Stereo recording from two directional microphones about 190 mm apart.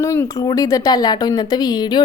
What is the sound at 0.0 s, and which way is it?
Speech, 15° left (ahead or behind).